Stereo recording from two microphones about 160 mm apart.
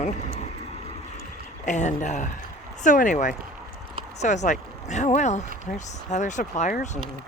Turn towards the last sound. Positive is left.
turn(degrees=50)  # may be behind; listen again after turning